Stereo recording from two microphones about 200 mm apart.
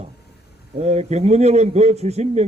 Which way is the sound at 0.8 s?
35° right (ahead or behind).